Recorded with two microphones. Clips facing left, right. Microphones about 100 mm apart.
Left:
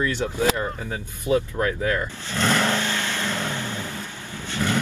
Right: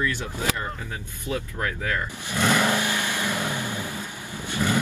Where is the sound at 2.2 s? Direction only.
10° right (ahead or behind).